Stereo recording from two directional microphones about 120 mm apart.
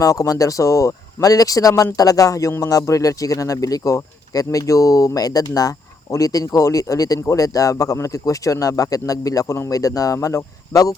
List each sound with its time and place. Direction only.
0.0 s speech: 30° left (ahead or behind)